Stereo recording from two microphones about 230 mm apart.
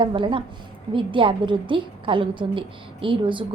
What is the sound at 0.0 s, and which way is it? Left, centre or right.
A woman's voice, right.